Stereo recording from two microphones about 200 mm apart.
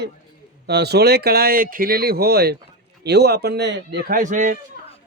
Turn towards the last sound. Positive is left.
turn(degrees=-40)  # may be behind; listen again after turning